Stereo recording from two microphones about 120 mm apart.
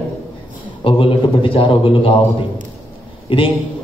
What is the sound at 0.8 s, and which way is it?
A man's voice, 50° left (ahead or behind).